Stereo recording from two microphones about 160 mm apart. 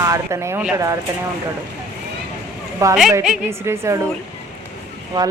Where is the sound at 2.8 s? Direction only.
15° right (ahead or behind).